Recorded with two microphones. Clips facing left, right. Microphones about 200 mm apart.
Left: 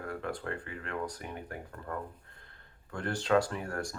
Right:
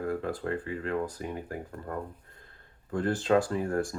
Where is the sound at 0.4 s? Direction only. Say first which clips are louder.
Right 7 dB; 35° right (ahead or behind).